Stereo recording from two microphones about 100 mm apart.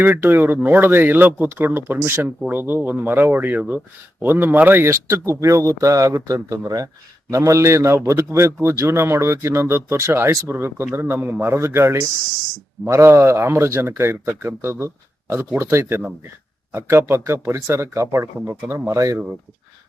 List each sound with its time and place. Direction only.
0.0 s speech: 20° right (ahead or behind)